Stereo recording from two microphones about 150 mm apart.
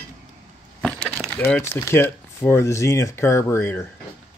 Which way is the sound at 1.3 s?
10° left (ahead or behind).